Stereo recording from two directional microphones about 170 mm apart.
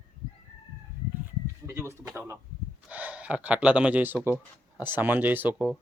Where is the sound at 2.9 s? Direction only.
10° right (ahead or behind).